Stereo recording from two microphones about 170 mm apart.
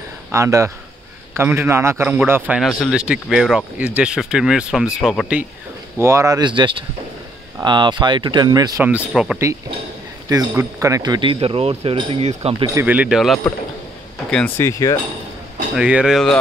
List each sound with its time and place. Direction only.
0.3 s a man's voice: 15° right (ahead or behind); by 5.4 s centre (ahead or behind)
5.9 s speech: 15° right (ahead or behind)
8.8 s a man's voice: 5° right (ahead or behind)
10.3 s speech: 15° right (ahead or behind); by 12.6 s 35° right (ahead or behind)
12.8 s a man's voice: 10° right (ahead or behind)
14.3 s speech: 10° left (ahead or behind)
15.7 s a man's voice: 5° right (ahead or behind)